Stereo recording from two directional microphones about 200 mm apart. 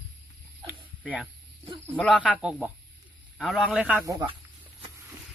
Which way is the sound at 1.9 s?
5° left (ahead or behind).